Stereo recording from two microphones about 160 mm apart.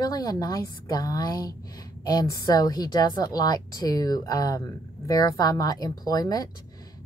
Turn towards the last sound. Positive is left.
turn(degrees=25)  # may be behind; listen again after turning